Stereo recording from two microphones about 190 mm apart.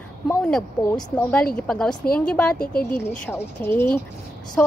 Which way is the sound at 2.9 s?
10° left (ahead or behind).